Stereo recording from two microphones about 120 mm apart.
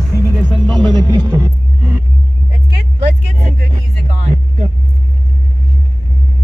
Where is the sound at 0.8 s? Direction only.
35° right (ahead or behind).